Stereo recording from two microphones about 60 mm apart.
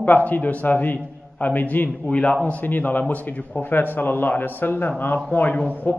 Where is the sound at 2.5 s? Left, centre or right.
Left.